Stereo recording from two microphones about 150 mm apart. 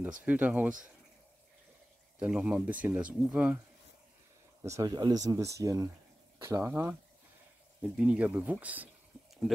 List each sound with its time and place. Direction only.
0.2 s speech: 10° right (ahead or behind)
2.1 s speech: 10° right (ahead or behind)
4.6 s speech: 20° right (ahead or behind)